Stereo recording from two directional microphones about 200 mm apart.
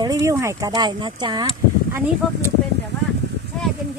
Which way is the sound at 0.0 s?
15° right (ahead or behind).